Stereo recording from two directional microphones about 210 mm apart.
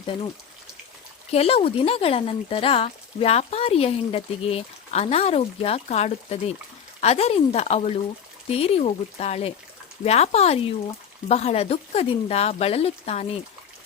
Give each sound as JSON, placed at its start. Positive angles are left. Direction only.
{"t": 1.3, "sound": "speech", "side_deg": 30}